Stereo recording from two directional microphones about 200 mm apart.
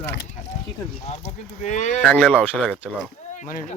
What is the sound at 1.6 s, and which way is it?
Speech, 35° left (ahead or behind).